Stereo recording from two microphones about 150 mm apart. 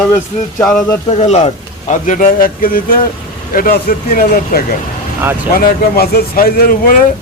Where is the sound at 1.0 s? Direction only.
45° left (ahead or behind).